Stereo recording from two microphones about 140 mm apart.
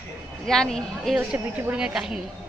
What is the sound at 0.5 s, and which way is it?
Speech, 5° left (ahead or behind).